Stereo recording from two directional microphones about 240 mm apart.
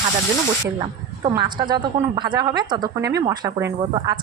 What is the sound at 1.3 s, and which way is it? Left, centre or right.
Speech, centre.